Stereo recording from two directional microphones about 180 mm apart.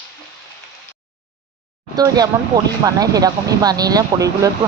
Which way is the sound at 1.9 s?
20° right (ahead or behind).